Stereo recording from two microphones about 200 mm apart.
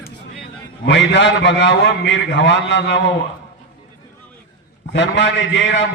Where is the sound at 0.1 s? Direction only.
60° left (ahead or behind).